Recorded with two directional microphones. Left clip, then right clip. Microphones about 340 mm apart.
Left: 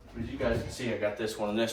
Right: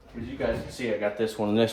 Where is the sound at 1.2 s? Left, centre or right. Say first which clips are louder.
Right 6 dB; right.